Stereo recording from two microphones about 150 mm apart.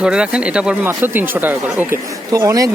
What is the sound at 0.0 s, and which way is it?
Speech, 5° right (ahead or behind).